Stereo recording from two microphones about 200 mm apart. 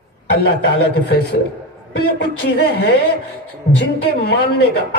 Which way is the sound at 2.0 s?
55° left (ahead or behind).